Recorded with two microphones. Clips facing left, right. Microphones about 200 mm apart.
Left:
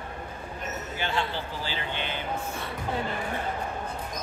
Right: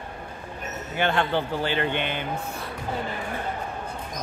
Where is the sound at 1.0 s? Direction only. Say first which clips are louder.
Right 8 dB; 60° right (ahead or behind).